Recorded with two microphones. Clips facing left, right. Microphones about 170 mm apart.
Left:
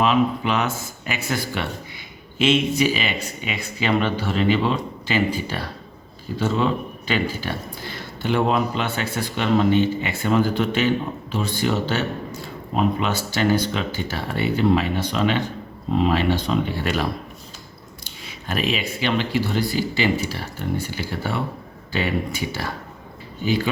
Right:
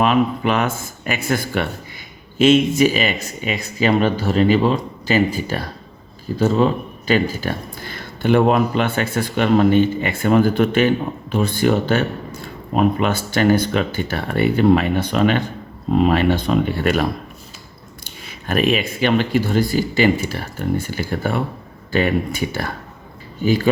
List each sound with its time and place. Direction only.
0.0 s speech: 55° right (ahead or behind)